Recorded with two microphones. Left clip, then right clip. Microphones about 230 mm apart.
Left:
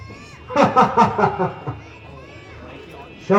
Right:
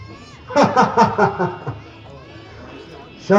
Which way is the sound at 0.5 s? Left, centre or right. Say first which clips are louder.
Right 1 dB; right.